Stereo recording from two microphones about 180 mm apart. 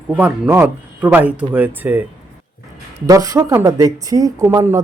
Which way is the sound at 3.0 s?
20° right (ahead or behind).